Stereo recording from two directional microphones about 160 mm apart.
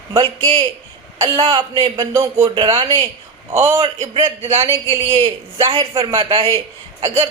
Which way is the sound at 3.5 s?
20° right (ahead or behind).